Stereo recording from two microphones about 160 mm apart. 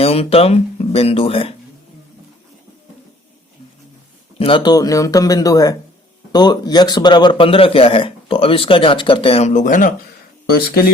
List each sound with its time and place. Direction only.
0.0 s speech: 40° left (ahead or behind)
4.4 s a man's voice: 35° left (ahead or behind); by 9.9 s 55° left (ahead or behind)
10.5 s speech: 70° left (ahead or behind)